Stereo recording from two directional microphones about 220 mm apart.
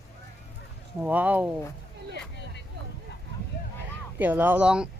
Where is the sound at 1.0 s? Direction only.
5° right (ahead or behind).